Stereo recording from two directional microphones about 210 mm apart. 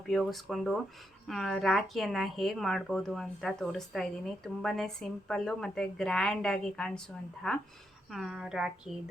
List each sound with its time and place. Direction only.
0.1 s speech: centre (ahead or behind)